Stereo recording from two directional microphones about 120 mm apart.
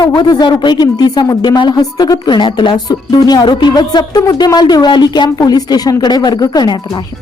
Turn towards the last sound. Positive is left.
turn(degrees=35)  # may be behind; listen again after turning